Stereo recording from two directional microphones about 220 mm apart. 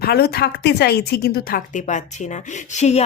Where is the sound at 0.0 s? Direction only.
45° left (ahead or behind).